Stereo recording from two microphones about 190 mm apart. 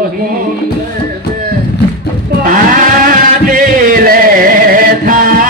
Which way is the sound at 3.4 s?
45° right (ahead or behind).